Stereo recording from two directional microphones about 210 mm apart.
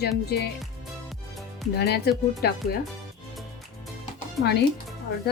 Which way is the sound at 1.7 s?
50° left (ahead or behind).